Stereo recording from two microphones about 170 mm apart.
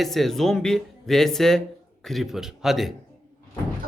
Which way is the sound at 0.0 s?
Centre (ahead or behind).